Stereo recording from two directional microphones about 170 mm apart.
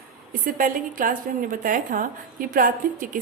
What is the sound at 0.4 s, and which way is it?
A woman's voice, 55° right (ahead or behind).